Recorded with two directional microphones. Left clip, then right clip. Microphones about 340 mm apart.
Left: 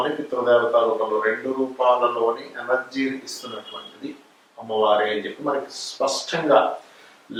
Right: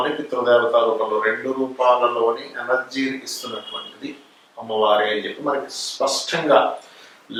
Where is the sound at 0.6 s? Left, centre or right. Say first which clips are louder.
Right 2 dB; left.